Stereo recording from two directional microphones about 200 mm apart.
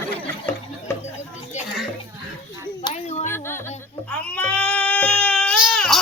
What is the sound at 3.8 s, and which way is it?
Baby cry, 5° left (ahead or behind).